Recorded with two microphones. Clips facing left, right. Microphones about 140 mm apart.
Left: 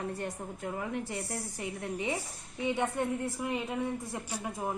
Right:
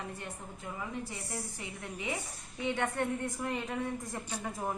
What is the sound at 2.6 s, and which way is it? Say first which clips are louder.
A woman's voice: left 2 dB; 10° left (ahead or behind).